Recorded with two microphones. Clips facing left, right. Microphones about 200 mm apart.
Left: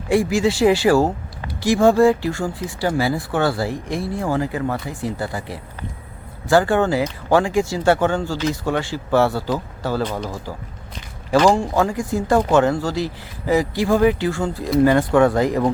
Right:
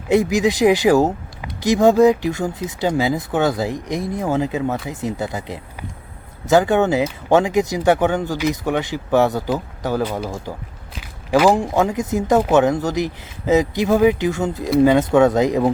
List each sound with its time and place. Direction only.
0.1 s speech: 20° right (ahead or behind)
10.0 s speech: 5° right (ahead or behind)
10.9 s walk: 5° right (ahead or behind)
11.5 s speech: 20° right (ahead or behind)